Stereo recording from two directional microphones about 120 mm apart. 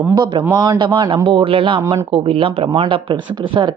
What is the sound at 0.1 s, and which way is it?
Speech, 35° right (ahead or behind).